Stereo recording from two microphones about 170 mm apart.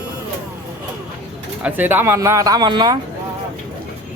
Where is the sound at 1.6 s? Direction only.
10° right (ahead or behind); by 3.0 s 25° right (ahead or behind).